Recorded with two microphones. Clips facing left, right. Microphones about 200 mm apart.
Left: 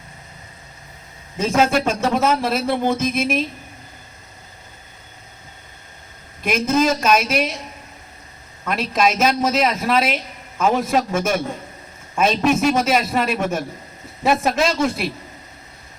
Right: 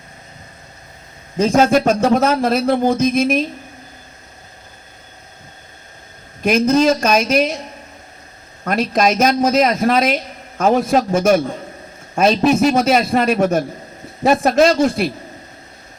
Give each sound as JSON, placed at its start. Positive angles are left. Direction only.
{"t": 1.5, "sound": "a man's voice", "side_deg": -40}
{"t": 3.0, "sound": "a woman's voice", "side_deg": 0}
{"t": 6.4, "sound": "a woman's voice", "side_deg": -40}
{"t": 8.6, "sound": "a man's voice", "side_deg": -40}